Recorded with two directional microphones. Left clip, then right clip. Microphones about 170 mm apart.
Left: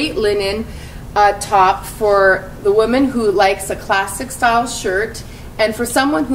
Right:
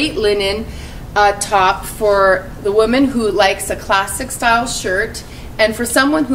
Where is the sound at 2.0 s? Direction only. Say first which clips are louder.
Even; 5° right (ahead or behind).